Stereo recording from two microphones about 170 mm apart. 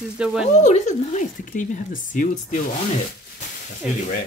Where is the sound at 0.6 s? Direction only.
45° left (ahead or behind).